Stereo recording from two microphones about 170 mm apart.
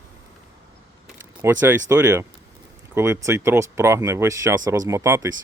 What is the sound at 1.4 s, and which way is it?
Speech, 10° right (ahead or behind).